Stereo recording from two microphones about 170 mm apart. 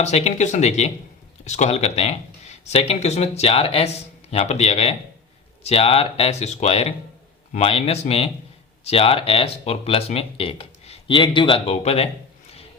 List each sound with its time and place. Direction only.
0.0 s speech: 40° left (ahead or behind)